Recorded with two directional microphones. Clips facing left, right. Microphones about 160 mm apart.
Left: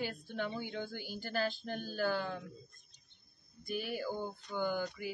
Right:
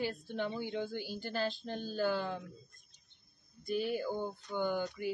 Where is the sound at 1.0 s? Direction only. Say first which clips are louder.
Even; 30° right (ahead or behind).